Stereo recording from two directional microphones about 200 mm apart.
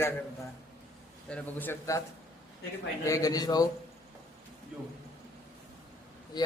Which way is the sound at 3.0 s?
15° left (ahead or behind).